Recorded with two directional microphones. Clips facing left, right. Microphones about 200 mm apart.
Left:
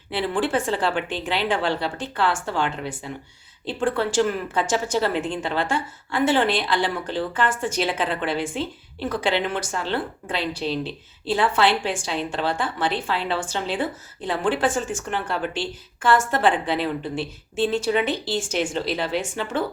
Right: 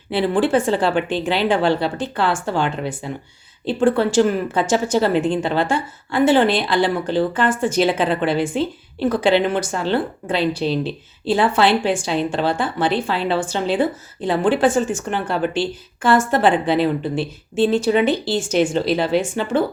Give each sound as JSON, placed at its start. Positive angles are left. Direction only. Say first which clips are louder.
{"t": 0.1, "sound": "speech", "louder": "right 6 dB", "side_deg": -30}
{"t": 3.8, "sound": "speech", "louder": "right 6 dB", "side_deg": -25}